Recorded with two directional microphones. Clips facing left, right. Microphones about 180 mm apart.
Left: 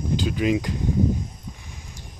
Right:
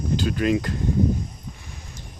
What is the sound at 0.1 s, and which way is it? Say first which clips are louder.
Speech: right 1 dB; 15° left (ahead or behind).